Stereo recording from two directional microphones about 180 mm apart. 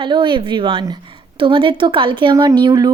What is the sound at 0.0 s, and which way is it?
Speech, 25° right (ahead or behind).